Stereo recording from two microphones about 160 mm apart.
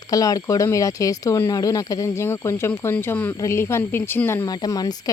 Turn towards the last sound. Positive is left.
turn(degrees=25)  # may be behind; listen again after turning